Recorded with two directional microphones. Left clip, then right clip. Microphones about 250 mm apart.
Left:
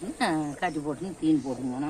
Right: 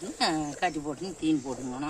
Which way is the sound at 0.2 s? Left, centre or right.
Centre.